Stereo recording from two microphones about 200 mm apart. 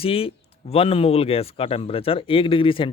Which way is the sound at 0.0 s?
30° left (ahead or behind).